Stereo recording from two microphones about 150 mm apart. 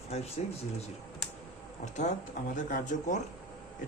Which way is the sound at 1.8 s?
50° left (ahead or behind).